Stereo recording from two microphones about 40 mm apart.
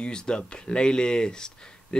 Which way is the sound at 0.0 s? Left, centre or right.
Left.